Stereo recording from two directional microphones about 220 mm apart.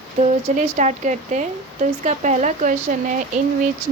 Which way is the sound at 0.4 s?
30° right (ahead or behind).